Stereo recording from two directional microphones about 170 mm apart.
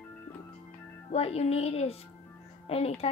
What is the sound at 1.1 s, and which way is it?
Speech, 35° left (ahead or behind).